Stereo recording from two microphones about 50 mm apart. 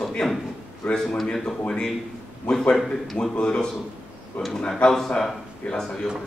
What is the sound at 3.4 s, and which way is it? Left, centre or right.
A man's voice, centre.